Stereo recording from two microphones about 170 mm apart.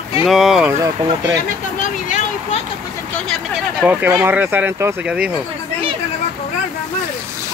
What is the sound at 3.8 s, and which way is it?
Speech, 10° right (ahead or behind).